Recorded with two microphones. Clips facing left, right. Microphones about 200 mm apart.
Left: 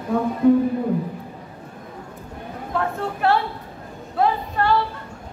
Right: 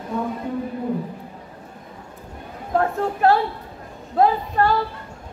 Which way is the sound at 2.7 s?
40° right (ahead or behind).